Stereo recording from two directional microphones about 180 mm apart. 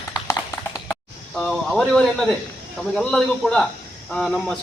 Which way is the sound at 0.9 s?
5° left (ahead or behind).